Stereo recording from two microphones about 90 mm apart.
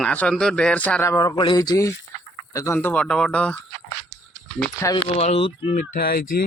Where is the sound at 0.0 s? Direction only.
15° left (ahead or behind).